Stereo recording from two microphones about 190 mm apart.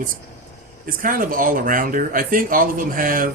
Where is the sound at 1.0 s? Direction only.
45° right (ahead or behind).